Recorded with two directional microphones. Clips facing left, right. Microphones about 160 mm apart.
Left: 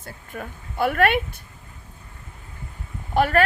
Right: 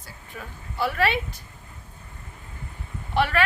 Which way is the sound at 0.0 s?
55° left (ahead or behind).